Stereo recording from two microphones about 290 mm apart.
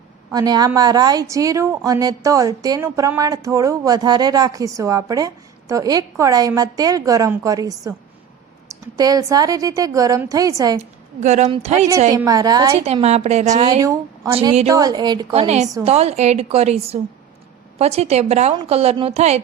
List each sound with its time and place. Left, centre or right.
0.3 s a woman's voice: centre
11.2 s a woman's voice: right
11.9 s a woman's voice: centre
13.8 s a woman's voice: centre